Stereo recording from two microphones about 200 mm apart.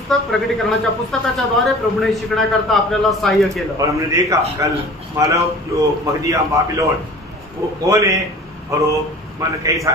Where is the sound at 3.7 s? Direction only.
15° right (ahead or behind).